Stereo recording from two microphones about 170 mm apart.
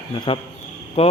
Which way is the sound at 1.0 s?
35° left (ahead or behind).